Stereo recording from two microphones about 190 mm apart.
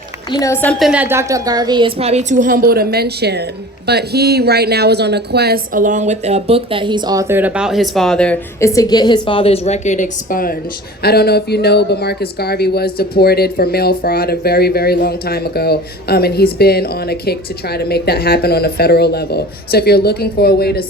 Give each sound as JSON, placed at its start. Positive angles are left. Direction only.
{"t": 0.3, "sound": "a woman's voice", "side_deg": 20}
{"t": 8.7, "sound": "a woman's voice", "side_deg": 20}